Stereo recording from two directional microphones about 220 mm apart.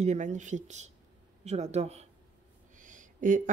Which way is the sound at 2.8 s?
35° right (ahead or behind).